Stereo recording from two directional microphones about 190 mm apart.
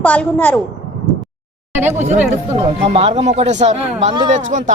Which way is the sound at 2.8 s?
35° right (ahead or behind).